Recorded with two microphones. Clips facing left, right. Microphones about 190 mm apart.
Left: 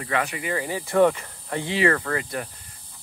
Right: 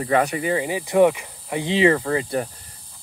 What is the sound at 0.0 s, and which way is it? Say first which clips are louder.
Speech: right 7 dB; 40° right (ahead or behind).